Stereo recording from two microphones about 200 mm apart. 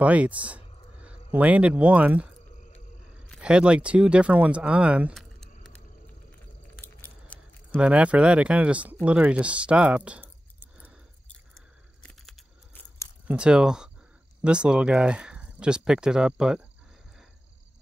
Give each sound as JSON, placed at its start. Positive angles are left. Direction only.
{"t": 0.0, "sound": "speech", "side_deg": -5}
{"t": 6.8, "sound": "biting", "side_deg": 10}
{"t": 7.7, "sound": "speech", "side_deg": -5}
{"t": 13.3, "sound": "speech", "side_deg": -5}